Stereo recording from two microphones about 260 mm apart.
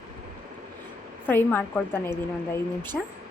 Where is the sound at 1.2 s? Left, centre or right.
Centre.